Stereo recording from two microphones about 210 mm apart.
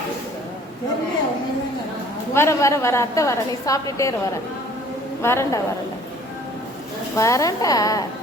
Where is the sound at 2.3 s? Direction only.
10° left (ahead or behind).